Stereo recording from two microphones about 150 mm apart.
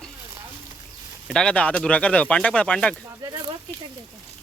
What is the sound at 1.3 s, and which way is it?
Speech, 5° left (ahead or behind).